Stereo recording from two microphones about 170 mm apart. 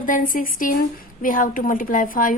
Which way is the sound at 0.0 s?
55° left (ahead or behind).